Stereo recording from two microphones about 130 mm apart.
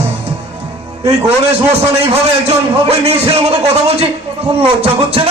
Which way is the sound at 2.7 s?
50° right (ahead or behind).